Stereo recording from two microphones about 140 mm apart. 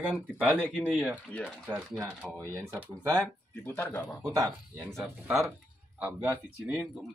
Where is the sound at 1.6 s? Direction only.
10° right (ahead or behind).